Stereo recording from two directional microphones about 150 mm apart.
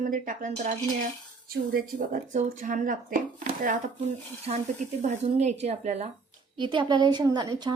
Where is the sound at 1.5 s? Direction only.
85° right; by 6.1 s 45° right (ahead or behind).